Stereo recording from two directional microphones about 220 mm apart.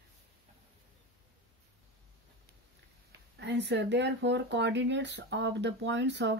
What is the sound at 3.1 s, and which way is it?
Speech, 50° right (ahead or behind).